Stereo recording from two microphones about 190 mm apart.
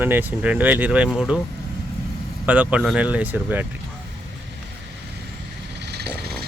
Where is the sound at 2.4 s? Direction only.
10° right (ahead or behind).